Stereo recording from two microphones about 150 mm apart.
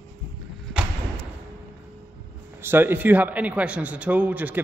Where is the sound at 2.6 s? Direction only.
15° right (ahead or behind).